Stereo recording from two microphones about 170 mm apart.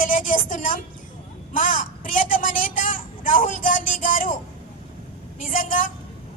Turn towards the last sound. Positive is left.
turn(degrees=50)  # may be behind; listen again after turning